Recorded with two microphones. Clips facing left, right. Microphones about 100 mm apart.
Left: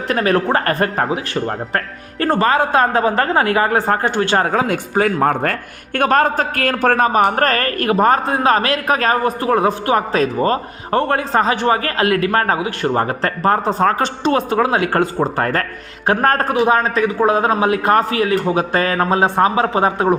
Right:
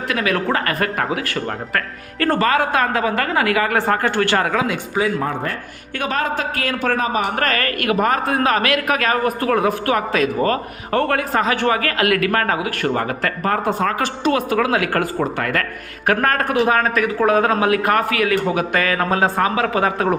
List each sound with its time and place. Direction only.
0.1 s a man's voice: 40° left (ahead or behind)
4.4 s a man's voice: 40° left (ahead or behind); by 20.1 s 25° left (ahead or behind)